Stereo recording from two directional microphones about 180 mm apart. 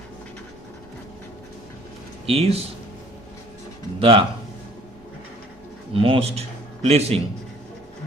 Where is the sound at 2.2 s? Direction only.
35° right (ahead or behind).